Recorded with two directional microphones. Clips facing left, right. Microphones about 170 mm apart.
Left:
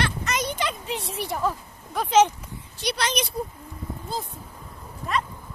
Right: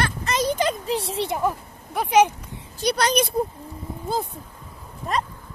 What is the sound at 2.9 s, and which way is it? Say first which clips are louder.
Speech: right 6 dB; 45° right (ahead or behind).